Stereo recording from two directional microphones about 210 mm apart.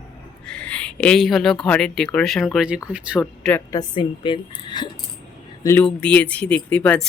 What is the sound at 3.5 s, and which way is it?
Speech, 15° left (ahead or behind).